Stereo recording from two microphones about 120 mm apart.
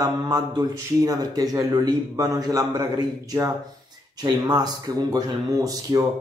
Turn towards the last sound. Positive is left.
turn(degrees=-30)  # may be behind; listen again after turning